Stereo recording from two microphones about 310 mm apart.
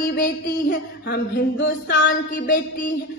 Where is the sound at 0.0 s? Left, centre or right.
Left.